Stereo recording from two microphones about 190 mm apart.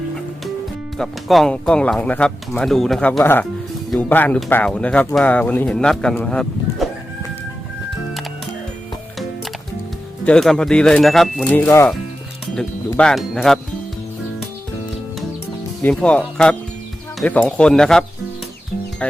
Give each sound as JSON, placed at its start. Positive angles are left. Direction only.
{"t": 0.9, "sound": "speech", "side_deg": 0}
{"t": 10.2, "sound": "speech", "side_deg": 5}
{"t": 15.8, "sound": "speech", "side_deg": 5}